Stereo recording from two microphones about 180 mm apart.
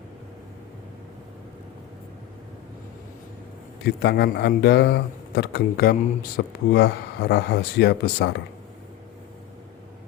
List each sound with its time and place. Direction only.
3.8 s a man's voice: 65° left (ahead or behind)